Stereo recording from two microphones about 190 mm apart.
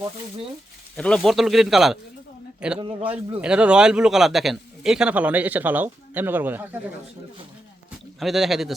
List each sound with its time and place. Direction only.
0.9 s speech: 5° left (ahead or behind)
2.7 s a man's voice: 25° right (ahead or behind)
3.1 s a man's voice: 5° right (ahead or behind)
7.9 s a sound: centre (ahead or behind)